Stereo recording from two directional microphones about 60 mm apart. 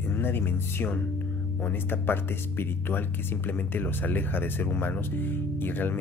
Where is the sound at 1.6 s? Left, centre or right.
Left.